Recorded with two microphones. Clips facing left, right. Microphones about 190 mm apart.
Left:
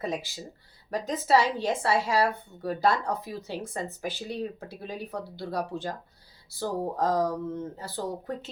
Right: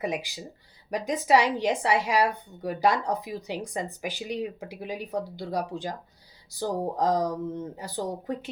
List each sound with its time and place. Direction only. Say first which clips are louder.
0.0 s a woman's voice: right 2 dB; 15° right (ahead or behind)